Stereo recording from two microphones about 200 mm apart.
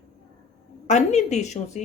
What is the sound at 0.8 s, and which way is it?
Speech, 35° left (ahead or behind).